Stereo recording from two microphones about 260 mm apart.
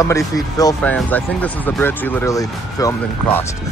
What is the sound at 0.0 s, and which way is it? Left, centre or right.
A man's voice, centre.